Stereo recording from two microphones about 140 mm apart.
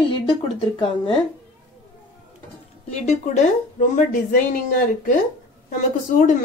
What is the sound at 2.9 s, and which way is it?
A woman's voice, 55° left (ahead or behind).